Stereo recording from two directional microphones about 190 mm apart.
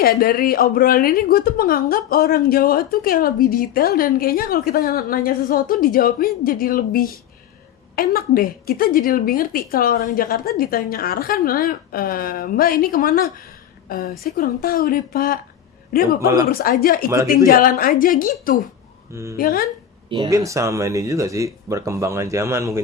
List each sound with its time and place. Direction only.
0.0 s speech: 50° left (ahead or behind)
16.2 s speech: 20° right (ahead or behind)
16.5 s speech: 50° left (ahead or behind)
19.1 s speech: 15° right (ahead or behind)
19.4 s speech: 50° left (ahead or behind)
20.1 s speech: 25° right (ahead or behind)